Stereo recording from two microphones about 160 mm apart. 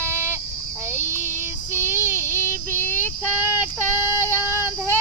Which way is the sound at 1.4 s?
15° right (ahead or behind).